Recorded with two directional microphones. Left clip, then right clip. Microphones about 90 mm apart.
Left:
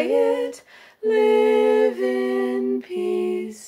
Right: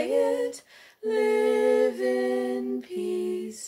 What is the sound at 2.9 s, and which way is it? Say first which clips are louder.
Lullaby: left 4 dB; 30° left (ahead or behind).